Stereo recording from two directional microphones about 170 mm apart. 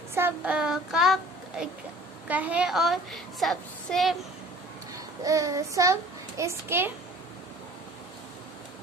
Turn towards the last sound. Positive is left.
turn(degrees=-15)  # may be behind; listen again after turning